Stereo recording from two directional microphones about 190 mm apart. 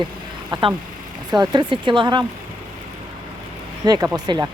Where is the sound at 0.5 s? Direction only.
25° right (ahead or behind).